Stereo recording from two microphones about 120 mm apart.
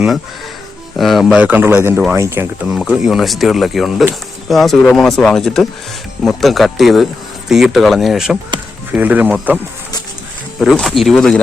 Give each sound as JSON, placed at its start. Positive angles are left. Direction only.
{"t": 0.9, "sound": "speech", "side_deg": 0}
{"t": 1.5, "sound": "speech", "side_deg": -15}
{"t": 2.6, "sound": "speech", "side_deg": -5}
{"t": 10.6, "sound": "speech", "side_deg": 0}